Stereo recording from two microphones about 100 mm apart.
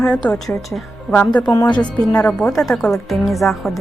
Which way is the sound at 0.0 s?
10° left (ahead or behind).